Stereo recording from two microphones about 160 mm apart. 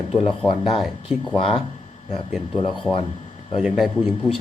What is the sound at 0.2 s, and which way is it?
Speech, 35° left (ahead or behind).